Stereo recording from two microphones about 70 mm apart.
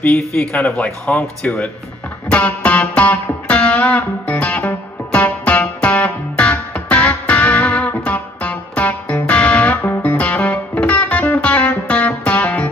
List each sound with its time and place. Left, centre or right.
0.7 s speech: centre
2.2 s music: centre